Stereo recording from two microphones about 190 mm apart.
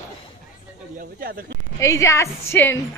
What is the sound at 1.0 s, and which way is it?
Speech, 50° right (ahead or behind).